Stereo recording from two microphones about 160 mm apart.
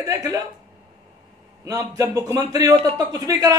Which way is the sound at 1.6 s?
20° right (ahead or behind).